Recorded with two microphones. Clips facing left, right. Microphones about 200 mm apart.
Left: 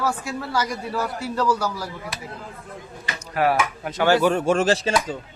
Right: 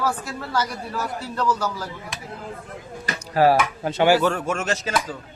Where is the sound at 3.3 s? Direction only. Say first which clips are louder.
Right 4 dB; 30° right (ahead or behind).